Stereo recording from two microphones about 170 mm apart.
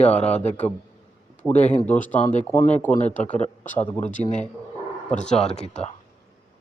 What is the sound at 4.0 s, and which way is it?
Speech, 45° left (ahead or behind).